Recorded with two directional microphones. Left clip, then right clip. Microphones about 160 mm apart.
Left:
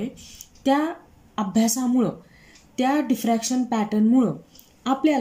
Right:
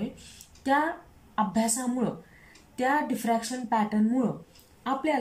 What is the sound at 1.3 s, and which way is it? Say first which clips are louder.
Speech: left 3 dB; 20° left (ahead or behind).